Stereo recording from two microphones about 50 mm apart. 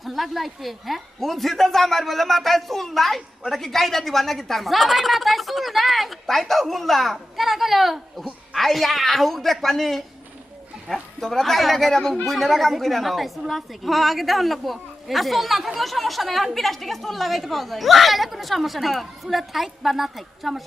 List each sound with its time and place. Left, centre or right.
0.0 s speech: centre